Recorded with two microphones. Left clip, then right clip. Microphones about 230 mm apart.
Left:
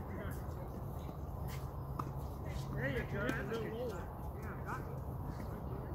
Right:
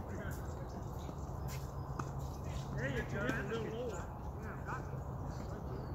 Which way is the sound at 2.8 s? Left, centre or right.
Left.